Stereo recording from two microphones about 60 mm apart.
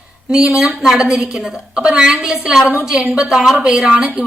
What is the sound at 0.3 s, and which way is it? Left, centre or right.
A woman's voice, centre.